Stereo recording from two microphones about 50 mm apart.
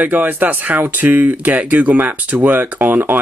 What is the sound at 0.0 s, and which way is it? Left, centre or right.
Speech, right.